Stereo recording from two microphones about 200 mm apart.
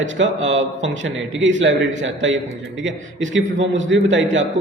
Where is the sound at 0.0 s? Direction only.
65° right (ahead or behind).